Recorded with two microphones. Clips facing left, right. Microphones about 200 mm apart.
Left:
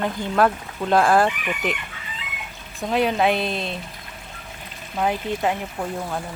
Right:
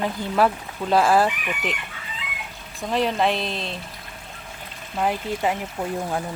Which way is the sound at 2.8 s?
5° left (ahead or behind).